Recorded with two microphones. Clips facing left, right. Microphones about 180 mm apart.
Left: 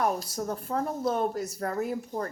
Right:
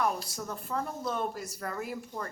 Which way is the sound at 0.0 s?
40° left (ahead or behind).